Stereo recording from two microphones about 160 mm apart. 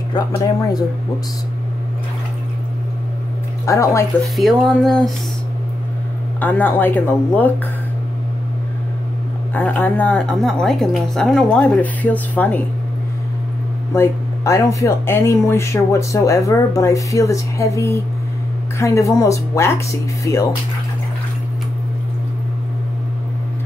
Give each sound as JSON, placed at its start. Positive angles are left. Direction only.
{"t": 0.1, "sound": "speech", "side_deg": 25}
{"t": 3.6, "sound": "speech", "side_deg": 20}
{"t": 4.4, "sound": "speech", "side_deg": 0}
{"t": 6.4, "sound": "a woman's voice", "side_deg": 10}
{"t": 9.5, "sound": "a woman's voice", "side_deg": 10}
{"t": 13.9, "sound": "speech", "side_deg": 15}